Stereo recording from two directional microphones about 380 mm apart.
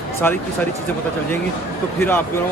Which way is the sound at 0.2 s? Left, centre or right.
Centre.